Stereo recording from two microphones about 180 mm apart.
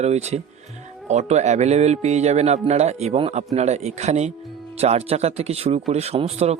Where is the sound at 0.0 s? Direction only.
35° right (ahead or behind).